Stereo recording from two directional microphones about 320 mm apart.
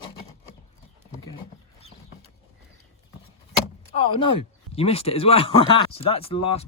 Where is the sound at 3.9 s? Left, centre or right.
Centre.